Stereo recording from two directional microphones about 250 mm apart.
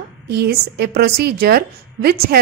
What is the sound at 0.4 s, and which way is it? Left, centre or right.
A woman's voice, right.